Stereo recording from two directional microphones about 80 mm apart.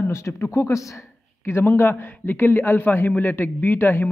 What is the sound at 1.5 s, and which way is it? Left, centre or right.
A man's voice, left.